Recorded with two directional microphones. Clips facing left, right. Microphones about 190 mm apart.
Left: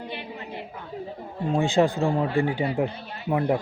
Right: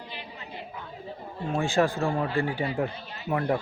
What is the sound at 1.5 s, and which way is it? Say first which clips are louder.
Speech: left 3 dB; 20° left (ahead or behind).